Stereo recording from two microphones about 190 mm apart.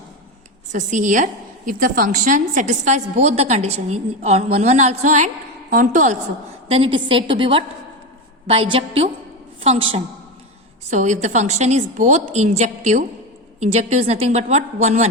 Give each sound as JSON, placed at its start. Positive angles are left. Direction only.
{"t": 0.7, "sound": "a woman's voice", "side_deg": -40}
{"t": 6.7, "sound": "a woman's voice", "side_deg": -30}